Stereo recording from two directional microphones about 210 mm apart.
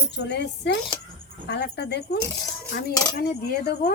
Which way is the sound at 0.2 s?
55° left (ahead or behind).